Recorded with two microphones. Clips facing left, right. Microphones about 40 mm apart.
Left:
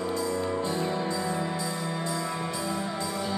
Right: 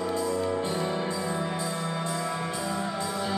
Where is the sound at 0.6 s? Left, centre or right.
Centre.